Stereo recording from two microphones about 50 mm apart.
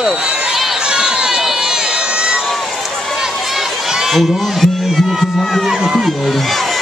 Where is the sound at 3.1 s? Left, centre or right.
Centre.